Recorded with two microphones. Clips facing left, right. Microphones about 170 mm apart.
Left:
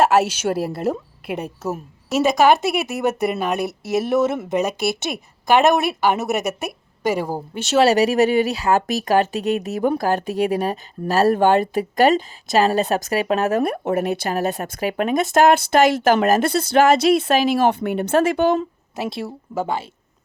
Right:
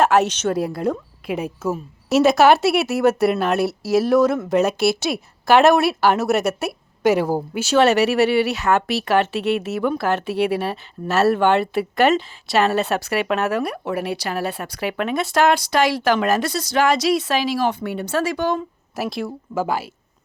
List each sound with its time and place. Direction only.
0.0 s speech: 5° left (ahead or behind)
2.2 s speech: 15° left (ahead or behind)
3.1 s speech: centre (ahead or behind)
3.4 s speech: 15° left (ahead or behind)
7.0 s speech: 10° left (ahead or behind)
7.3 s speech: 5° right (ahead or behind)
7.8 s speech: 35° left (ahead or behind); by 18.5 s 55° left (ahead or behind)
19.1 s speech: centre (ahead or behind)